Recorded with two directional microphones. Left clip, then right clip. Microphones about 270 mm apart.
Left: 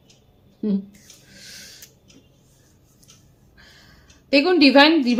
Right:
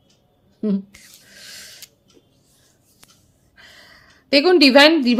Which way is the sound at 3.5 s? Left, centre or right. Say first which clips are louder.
Right 5 dB; right.